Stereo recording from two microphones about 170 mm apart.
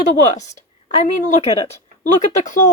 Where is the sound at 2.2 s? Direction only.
50° left (ahead or behind).